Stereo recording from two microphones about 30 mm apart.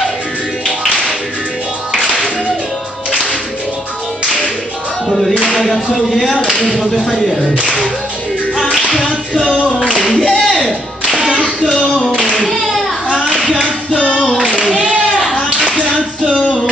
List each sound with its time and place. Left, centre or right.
5.7 s a sound: centre
7.5 s speech: right
10.1 s clapping: centre
10.4 s music: centre
12.4 s children playing: centre
13.4 s a sound: left